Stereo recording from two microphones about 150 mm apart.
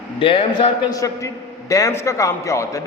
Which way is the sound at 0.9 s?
20° left (ahead or behind).